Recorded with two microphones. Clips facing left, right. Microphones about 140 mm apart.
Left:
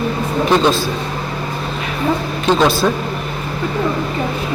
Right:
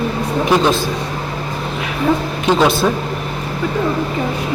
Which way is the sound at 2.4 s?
15° right (ahead or behind).